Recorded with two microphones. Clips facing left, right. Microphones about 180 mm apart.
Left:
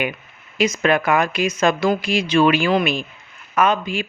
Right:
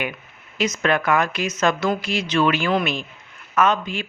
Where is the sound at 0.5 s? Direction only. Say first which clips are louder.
Left 3 dB; 10° left (ahead or behind).